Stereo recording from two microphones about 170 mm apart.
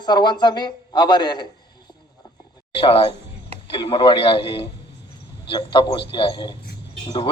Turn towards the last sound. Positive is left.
turn(degrees=30)  # may be behind; listen again after turning